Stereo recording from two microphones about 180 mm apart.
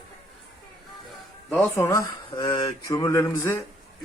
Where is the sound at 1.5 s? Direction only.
10° left (ahead or behind).